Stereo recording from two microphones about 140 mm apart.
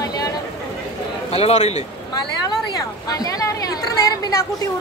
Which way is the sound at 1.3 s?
50° left (ahead or behind).